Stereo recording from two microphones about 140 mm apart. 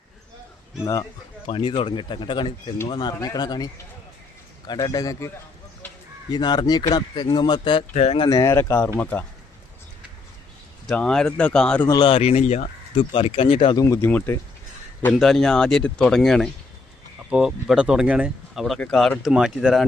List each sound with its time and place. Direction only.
1.5 s speech: 40° left (ahead or behind)
6.3 s speech: 30° left (ahead or behind)
7.9 s speech: 50° left (ahead or behind)
8.3 s speech: 20° left (ahead or behind)
10.8 s speech: 5° left (ahead or behind)
11.9 s speech: 30° left (ahead or behind)
12.1 s speech: 45° left (ahead or behind)
13.7 s speech: 20° left (ahead or behind)
15.2 s speech: centre (ahead or behind)